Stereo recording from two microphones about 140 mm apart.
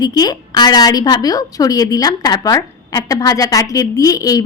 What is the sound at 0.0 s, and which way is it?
A woman's voice, 30° left (ahead or behind).